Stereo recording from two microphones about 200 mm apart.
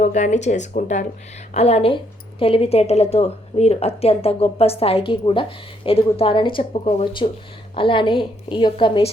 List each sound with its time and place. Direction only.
0.0 s a woman's voice: 35° left (ahead or behind)